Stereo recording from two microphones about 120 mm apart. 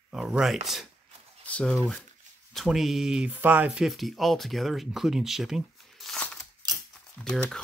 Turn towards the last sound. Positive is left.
turn(degrees=5)  # may be behind; listen again after turning